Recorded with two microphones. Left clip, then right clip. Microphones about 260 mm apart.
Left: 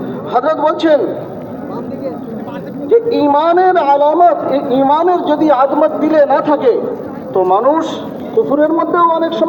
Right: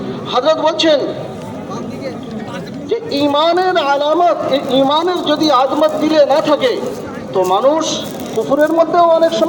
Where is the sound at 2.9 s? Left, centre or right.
Right.